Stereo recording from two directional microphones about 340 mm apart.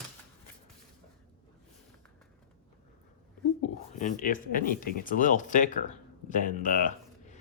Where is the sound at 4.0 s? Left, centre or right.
Left.